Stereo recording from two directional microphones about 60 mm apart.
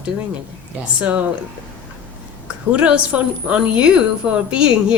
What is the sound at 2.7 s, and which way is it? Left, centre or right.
A woman's voice, centre.